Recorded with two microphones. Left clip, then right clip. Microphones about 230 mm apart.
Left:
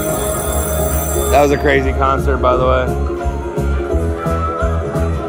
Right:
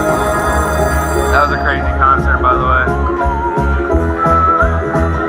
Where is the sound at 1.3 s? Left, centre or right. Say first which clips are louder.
Left 3 dB; left.